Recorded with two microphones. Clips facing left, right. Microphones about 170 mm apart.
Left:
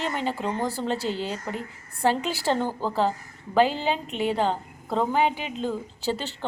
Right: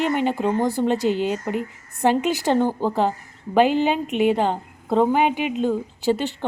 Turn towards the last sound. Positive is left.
turn(degrees=-15)  # may be behind; listen again after turning